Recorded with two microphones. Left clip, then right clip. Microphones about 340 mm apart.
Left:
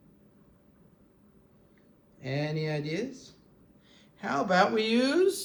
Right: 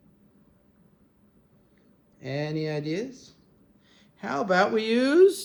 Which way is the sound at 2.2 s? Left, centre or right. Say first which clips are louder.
Right 2 dB; centre.